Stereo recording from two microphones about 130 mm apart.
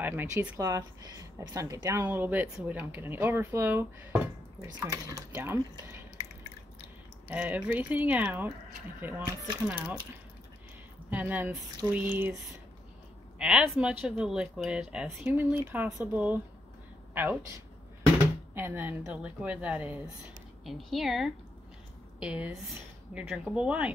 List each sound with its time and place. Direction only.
0.0 s speech: 15° right (ahead or behind)
0.6 s speech: 25° right (ahead or behind)
7.2 s speech: 10° right (ahead or behind)
11.1 s speech: 10° right (ahead or behind)
13.4 s speech: 10° right (ahead or behind)
18.5 s a woman's voice: 15° right (ahead or behind)